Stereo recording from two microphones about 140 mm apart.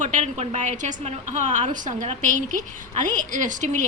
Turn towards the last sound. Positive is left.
turn(degrees=-65)  # may be behind; listen again after turning